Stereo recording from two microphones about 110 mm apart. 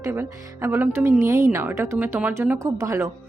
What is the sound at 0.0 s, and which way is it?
Speech, 20° right (ahead or behind).